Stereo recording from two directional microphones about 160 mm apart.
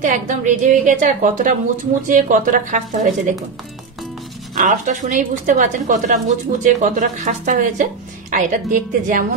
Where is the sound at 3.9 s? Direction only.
Centre (ahead or behind).